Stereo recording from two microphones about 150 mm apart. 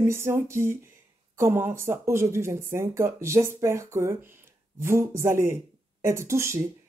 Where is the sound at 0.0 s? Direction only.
15° right (ahead or behind).